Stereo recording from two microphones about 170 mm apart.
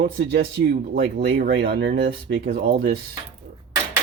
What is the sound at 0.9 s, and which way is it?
Speech, 65° right (ahead or behind).